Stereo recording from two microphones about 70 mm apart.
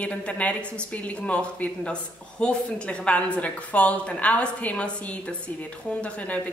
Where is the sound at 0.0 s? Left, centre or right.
Centre.